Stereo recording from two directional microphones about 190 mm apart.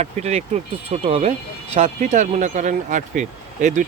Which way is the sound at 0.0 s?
35° right (ahead or behind).